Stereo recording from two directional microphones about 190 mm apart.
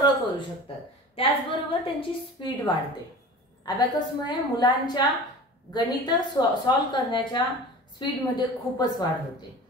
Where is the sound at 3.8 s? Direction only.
20° left (ahead or behind).